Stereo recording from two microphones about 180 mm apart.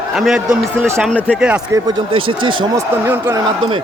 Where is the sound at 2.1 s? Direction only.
30° right (ahead or behind).